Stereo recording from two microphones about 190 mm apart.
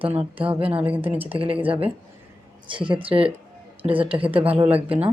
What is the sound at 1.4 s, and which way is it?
A woman's voice, 30° right (ahead or behind).